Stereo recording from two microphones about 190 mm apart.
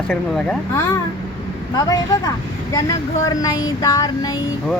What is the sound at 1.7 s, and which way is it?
Speech, 20° left (ahead or behind).